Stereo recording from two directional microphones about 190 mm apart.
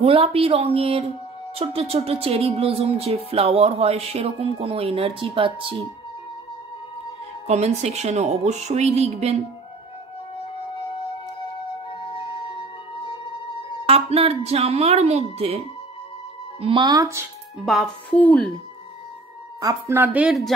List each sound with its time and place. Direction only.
0.0 s speech: 30° right (ahead or behind)
7.4 s speech: 35° right (ahead or behind)
11.9 s music: 25° left (ahead or behind)
13.8 s speech: 30° right (ahead or behind)
16.6 s speech: 25° right (ahead or behind)
17.6 s a woman's voice: 5° left (ahead or behind)
19.6 s a woman's voice: 15° right (ahead or behind)